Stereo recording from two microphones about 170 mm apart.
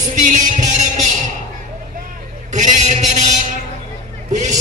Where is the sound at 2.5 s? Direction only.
45° right (ahead or behind).